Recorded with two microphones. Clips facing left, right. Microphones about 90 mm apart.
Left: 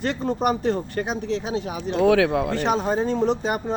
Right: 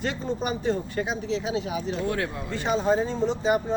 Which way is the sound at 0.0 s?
55° left (ahead or behind).